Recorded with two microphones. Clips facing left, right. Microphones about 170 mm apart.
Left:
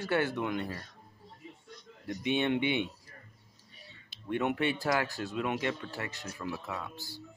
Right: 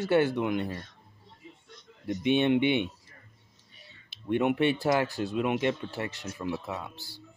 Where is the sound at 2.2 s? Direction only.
20° right (ahead or behind).